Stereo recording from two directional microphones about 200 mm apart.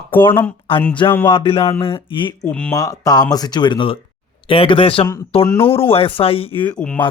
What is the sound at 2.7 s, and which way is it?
Speech, 15° left (ahead or behind).